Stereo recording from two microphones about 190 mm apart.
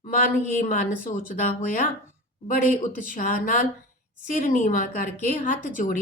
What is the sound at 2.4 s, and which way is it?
A woman's voice, 45° left (ahead or behind).